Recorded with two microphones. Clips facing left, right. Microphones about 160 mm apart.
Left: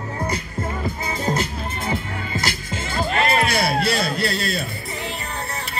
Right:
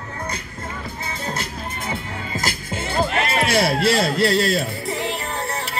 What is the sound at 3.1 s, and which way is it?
Speech, 90° right.